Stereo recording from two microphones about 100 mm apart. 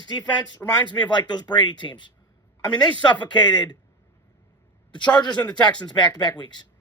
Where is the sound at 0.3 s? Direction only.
45° left (ahead or behind).